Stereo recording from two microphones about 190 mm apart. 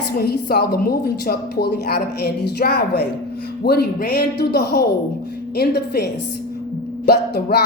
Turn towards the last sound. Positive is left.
turn(degrees=60)  # may be behind; listen again after turning